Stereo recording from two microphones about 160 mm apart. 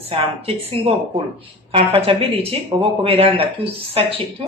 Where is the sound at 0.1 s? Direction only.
35° right (ahead or behind).